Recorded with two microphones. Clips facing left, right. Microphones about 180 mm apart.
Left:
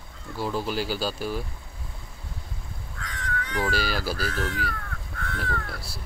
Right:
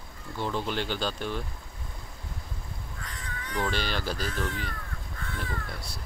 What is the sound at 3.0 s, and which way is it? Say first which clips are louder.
Crow: left 10 dB; 90° left.